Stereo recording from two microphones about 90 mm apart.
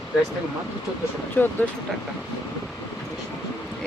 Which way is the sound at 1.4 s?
20° left (ahead or behind).